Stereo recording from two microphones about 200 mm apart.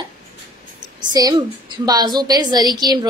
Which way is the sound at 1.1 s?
20° right (ahead or behind).